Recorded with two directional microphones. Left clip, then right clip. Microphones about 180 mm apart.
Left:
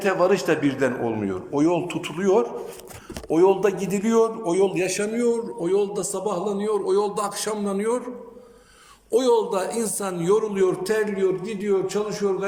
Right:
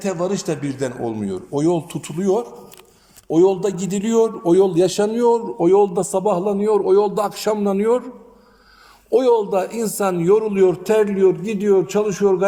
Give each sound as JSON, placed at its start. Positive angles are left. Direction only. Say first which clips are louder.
{"t": 0.0, "sound": "a man's voice", "louder": "left 3 dB", "side_deg": -25}
{"t": 3.4, "sound": "a man's voice", "louder": "even", "side_deg": -40}
{"t": 3.9, "sound": "a man's voice", "louder": "right 6 dB", "side_deg": -25}
{"t": 9.0, "sound": "a man's voice", "louder": "right 4 dB", "side_deg": -5}